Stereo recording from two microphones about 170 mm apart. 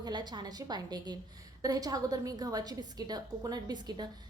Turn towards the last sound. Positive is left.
turn(degrees=-25)  # may be behind; listen again after turning